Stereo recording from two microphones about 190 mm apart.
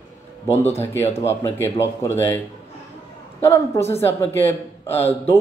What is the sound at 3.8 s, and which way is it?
Speech, 15° left (ahead or behind).